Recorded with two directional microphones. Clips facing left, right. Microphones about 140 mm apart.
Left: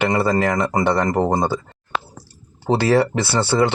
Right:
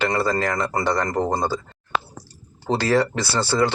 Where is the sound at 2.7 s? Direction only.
25° left (ahead or behind).